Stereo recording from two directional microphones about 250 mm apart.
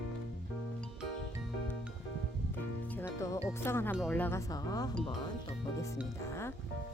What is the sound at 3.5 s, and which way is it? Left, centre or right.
A woman's voice, centre.